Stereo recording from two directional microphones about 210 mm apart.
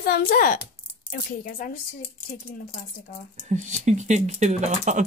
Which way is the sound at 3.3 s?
35° right (ahead or behind).